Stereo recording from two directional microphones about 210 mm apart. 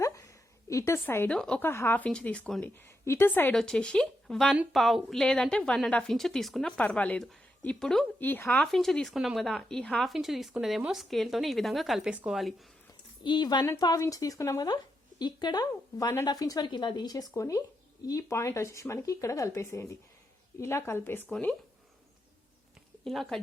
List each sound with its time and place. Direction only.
0.7 s speech: 15° left (ahead or behind)
13.2 s a woman's voice: 20° left (ahead or behind); by 21.5 s 5° left (ahead or behind)
23.0 s speech: centre (ahead or behind)